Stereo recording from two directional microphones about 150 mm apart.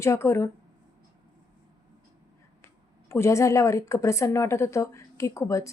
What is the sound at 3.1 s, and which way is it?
A woman's voice, 20° left (ahead or behind).